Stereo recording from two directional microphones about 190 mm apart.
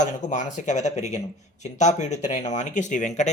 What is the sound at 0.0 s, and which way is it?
Speech, 40° left (ahead or behind).